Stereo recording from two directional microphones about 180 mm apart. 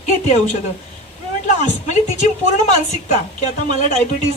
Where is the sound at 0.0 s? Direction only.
40° left (ahead or behind).